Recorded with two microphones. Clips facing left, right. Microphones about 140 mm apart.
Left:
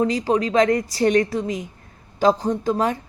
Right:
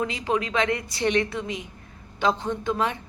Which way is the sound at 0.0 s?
35° left (ahead or behind).